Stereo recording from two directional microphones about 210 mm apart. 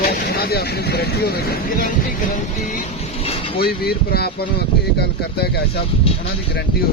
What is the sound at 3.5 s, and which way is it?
Speech, 45° left (ahead or behind).